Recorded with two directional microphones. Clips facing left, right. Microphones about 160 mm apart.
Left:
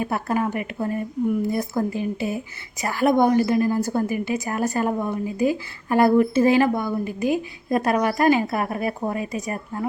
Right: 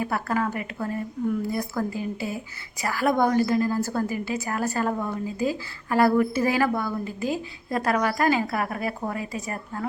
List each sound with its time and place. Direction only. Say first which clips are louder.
0.0 s a woman's voice: left 2 dB; 20° left (ahead or behind)